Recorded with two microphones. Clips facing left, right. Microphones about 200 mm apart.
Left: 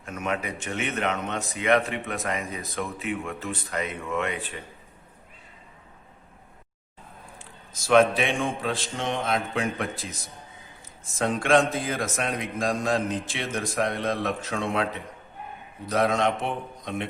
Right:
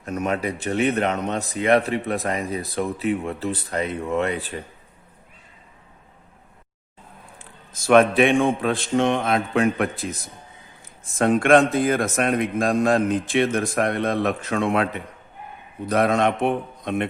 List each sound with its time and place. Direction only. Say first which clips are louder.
0.0 s speech: right 6 dB; 40° right (ahead or behind)
7.3 s a man's voice: right 1 dB; 55° right (ahead or behind)